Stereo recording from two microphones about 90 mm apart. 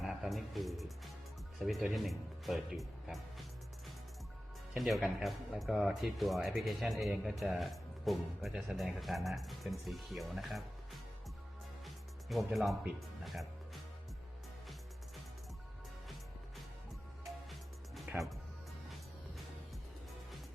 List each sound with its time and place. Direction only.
0.0 s music: centre (ahead or behind)
1.5 s speech: centre (ahead or behind)
4.8 s speech: centre (ahead or behind)
12.3 s speech: centre (ahead or behind)
18.1 s speech: 20° right (ahead or behind)